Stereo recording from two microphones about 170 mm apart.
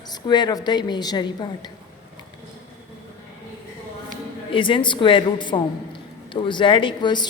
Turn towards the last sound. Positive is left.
turn(degrees=25)  # may be behind; listen again after turning